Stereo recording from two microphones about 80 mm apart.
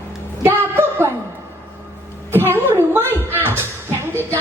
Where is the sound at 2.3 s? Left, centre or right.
Right.